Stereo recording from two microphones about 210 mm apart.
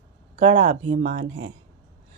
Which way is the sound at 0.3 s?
35° right (ahead or behind).